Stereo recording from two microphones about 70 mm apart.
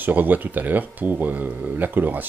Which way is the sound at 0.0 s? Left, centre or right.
Right.